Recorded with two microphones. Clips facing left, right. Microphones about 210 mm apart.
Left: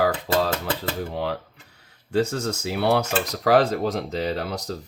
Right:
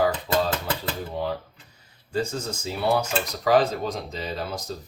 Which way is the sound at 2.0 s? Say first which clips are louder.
Left 5 dB; 70° left (ahead or behind).